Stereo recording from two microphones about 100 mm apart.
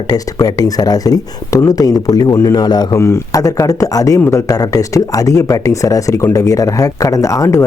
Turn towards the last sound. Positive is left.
turn(degrees=30)  # may be behind; listen again after turning